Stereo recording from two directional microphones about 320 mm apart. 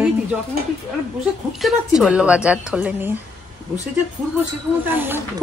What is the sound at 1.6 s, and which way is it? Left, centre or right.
A woman's voice, centre.